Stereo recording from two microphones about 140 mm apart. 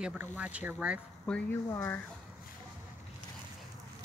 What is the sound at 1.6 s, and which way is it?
Speech, 20° left (ahead or behind).